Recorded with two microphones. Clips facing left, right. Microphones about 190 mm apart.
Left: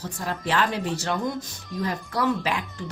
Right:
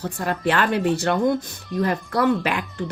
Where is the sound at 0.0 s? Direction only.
60° right (ahead or behind).